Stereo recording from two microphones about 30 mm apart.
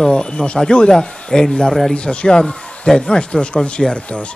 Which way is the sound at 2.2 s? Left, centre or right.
Left.